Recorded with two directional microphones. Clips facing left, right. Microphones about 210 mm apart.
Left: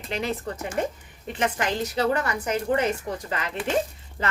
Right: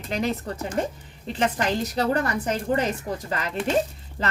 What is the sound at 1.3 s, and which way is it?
Speech, 35° right (ahead or behind).